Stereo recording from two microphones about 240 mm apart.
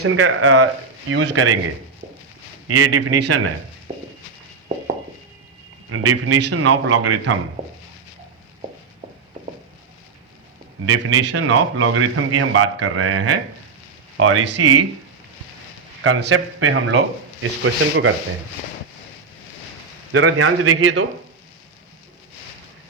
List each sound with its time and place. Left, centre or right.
0.0 s a man's voice: right
2.6 s a man's voice: right
5.9 s a man's voice: right
10.8 s a man's voice: right
16.0 s a man's voice: right
20.1 s a man's voice: right